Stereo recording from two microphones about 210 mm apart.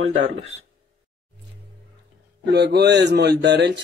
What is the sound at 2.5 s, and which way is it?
Speech, 50° right (ahead or behind).